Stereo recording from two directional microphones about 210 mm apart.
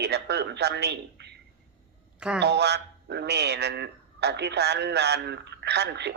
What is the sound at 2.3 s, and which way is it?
A man's voice, 50° right (ahead or behind).